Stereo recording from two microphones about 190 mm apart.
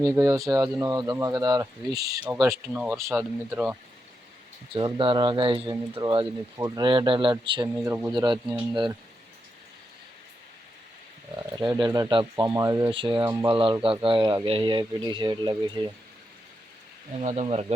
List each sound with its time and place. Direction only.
0.0 s speech: 15° right (ahead or behind)
4.7 s speech: 25° right (ahead or behind)
7.8 s speech: 10° right (ahead or behind)
8.1 s speech: 25° right (ahead or behind)
11.3 s speech: 20° right (ahead or behind)
12.9 s speech: 25° right (ahead or behind)
17.2 s speech: 35° right (ahead or behind)